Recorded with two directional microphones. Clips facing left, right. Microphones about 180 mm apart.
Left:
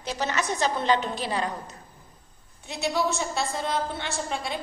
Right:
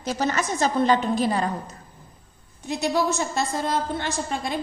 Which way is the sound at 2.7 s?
45° right (ahead or behind).